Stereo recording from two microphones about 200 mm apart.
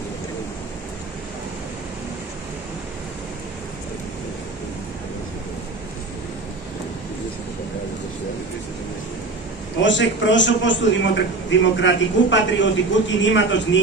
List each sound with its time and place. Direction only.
9.8 s a man's voice: 65° left (ahead or behind)